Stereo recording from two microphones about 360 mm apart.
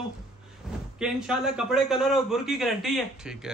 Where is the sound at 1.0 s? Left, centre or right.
Centre.